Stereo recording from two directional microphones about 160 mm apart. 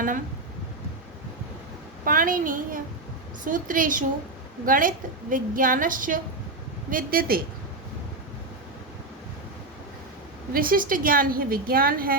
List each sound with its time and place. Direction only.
2.0 s a woman's voice: 60° right (ahead or behind)
10.5 s a woman's voice: 60° right (ahead or behind)